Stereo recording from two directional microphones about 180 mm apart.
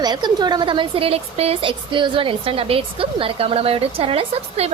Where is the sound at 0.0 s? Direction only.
25° right (ahead or behind).